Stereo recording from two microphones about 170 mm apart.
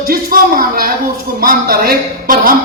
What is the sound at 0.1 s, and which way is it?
A man's voice, 55° right (ahead or behind).